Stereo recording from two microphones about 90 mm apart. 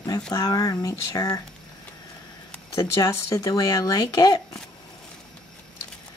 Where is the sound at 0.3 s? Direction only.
45° left (ahead or behind).